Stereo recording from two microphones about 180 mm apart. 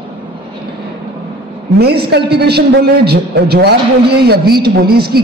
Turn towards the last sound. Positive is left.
turn(degrees=-60)  # may be behind; listen again after turning